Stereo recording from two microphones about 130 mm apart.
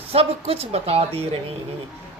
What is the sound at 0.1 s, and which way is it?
Speech, 50° right (ahead or behind).